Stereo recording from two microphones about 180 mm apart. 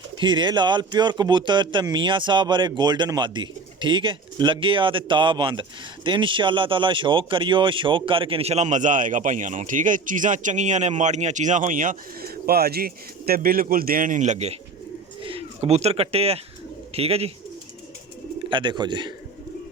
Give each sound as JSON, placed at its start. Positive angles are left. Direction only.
{"t": 0.2, "sound": "a man's voice", "side_deg": -25}
{"t": 18.4, "sound": "a man's voice", "side_deg": -25}